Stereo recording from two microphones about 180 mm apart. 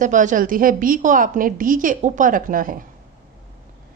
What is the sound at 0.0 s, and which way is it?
Speech, 45° right (ahead or behind).